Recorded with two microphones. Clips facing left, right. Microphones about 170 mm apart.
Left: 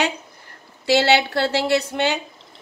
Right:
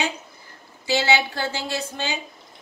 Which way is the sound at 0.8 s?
65° left (ahead or behind).